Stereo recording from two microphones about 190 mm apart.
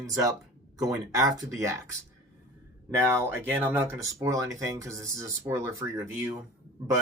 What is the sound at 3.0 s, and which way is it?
Speech, 10° right (ahead or behind).